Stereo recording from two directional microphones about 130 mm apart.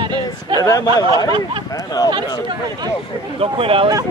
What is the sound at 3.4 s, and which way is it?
Speech, 45° right (ahead or behind).